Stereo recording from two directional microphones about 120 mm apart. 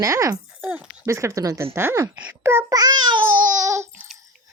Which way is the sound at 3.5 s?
25° right (ahead or behind).